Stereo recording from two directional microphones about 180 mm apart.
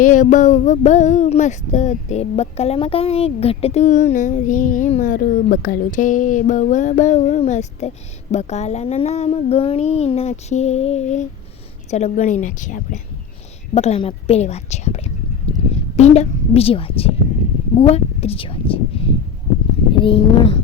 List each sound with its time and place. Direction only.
0.0 s child singing: 45° left (ahead or behind)
11.9 s speech: 40° left (ahead or behind)
13.7 s child singing: 35° left (ahead or behind)
19.9 s speech: 30° left (ahead or behind)